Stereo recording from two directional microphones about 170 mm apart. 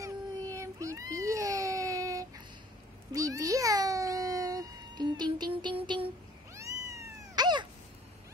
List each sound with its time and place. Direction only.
0.0 s baby cry: 20° right (ahead or behind)
3.1 s cat: 20° right (ahead or behind)